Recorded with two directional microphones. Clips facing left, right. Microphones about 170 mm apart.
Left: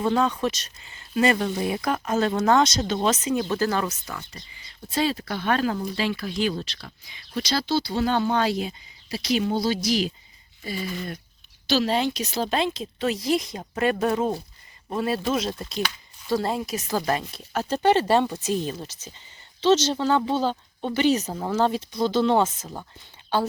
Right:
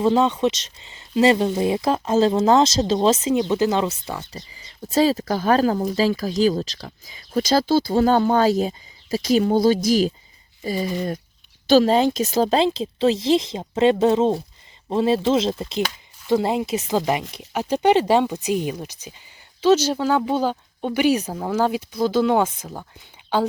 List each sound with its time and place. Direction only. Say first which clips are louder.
0.0 s speech: right 5 dB; 25° right (ahead or behind); by 23.0 s 10° right (ahead or behind)